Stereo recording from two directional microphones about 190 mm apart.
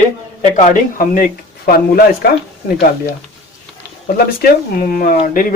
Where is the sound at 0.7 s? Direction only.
45° left (ahead or behind).